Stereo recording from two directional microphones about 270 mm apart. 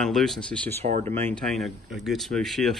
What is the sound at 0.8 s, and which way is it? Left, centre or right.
Speech, right.